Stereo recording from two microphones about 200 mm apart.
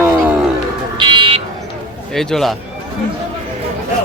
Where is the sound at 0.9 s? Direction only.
25° right (ahead or behind).